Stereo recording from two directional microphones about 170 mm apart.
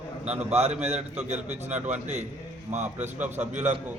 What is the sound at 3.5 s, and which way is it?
Speech, 45° right (ahead or behind).